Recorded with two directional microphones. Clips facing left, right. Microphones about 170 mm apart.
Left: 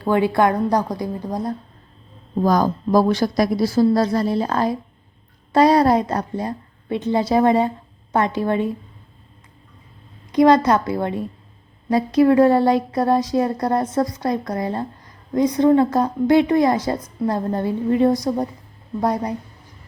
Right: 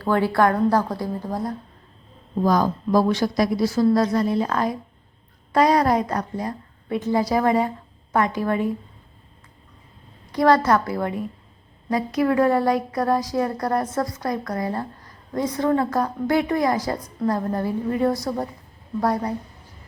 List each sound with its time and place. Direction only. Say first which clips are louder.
0.0 s a woman's voice: left 2 dB; 20° left (ahead or behind)
2.4 s a woman's voice: left 2 dB; 40° left (ahead or behind)
10.3 s a woman's voice: left 3 dB; 20° left (ahead or behind)